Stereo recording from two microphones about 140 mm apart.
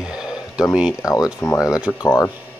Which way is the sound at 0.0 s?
5° right (ahead or behind).